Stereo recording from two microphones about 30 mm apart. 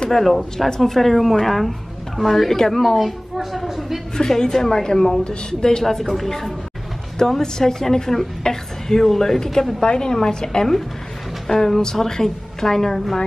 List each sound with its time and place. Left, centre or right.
0.1 s a woman's voice: centre
3.0 s a woman's voice: centre
4.2 s a woman's voice: centre
6.0 s speech: centre
7.2 s a woman's voice: centre